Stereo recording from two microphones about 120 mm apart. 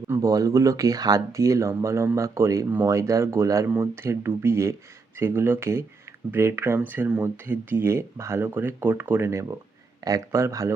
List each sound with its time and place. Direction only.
0.2 s speech: 30° right (ahead or behind)